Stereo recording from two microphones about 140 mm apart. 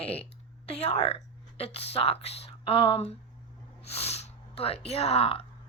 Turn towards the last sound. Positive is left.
turn(degrees=40)  # may be behind; listen again after turning